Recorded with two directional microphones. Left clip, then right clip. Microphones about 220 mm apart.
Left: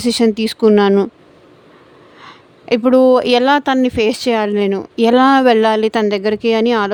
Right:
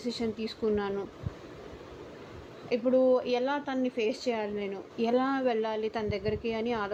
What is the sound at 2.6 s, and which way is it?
Speech, 55° left (ahead or behind).